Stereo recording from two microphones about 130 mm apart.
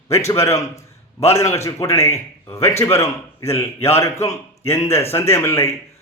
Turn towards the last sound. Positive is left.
turn(degrees=20)  # may be behind; listen again after turning